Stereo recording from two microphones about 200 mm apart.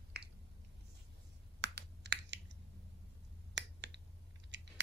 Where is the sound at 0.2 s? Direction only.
55° right (ahead or behind).